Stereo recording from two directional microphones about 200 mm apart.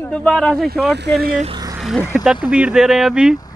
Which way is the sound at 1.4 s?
20° right (ahead or behind).